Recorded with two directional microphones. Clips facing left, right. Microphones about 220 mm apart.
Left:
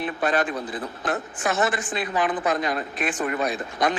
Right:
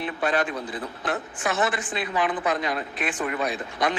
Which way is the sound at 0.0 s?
50° left (ahead or behind).